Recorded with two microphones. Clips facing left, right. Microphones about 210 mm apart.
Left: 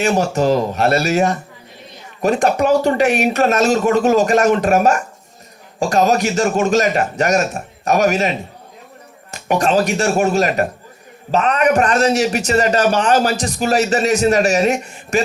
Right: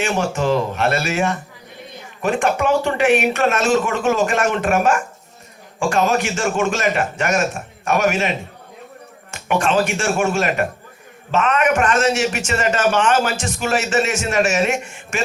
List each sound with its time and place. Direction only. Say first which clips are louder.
0.0 s a man's voice: left 4 dB; 40° left (ahead or behind)
9.3 s a man's voice: left 2 dB; 40° left (ahead or behind)